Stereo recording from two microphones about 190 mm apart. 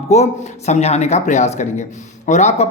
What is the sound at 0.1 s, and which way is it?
A man's voice, 35° left (ahead or behind).